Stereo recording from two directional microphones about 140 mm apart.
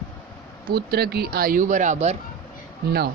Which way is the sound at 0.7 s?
90° right.